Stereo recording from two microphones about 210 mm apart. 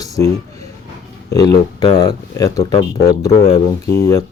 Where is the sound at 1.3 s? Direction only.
15° left (ahead or behind).